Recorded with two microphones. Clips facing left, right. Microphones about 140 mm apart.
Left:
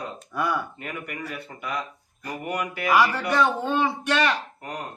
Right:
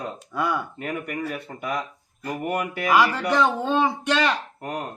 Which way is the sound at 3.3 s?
25° right (ahead or behind).